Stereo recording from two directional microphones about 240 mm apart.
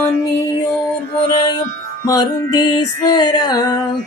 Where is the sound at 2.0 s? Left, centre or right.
Centre.